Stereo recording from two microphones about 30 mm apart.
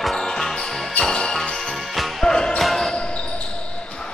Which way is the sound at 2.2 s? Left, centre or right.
Centre.